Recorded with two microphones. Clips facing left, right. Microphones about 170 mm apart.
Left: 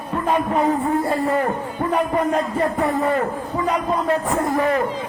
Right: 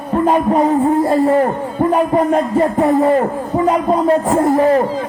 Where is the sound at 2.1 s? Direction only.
35° right (ahead or behind).